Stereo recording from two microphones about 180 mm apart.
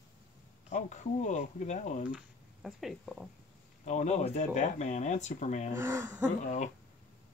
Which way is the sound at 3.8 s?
40° left (ahead or behind).